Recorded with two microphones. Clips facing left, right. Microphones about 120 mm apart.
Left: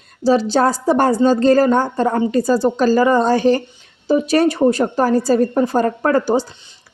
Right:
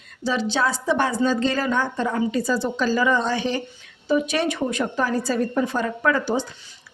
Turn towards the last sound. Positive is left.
turn(degrees=40)  # may be behind; listen again after turning